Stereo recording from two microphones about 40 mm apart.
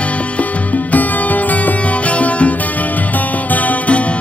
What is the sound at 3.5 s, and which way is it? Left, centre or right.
Music, left.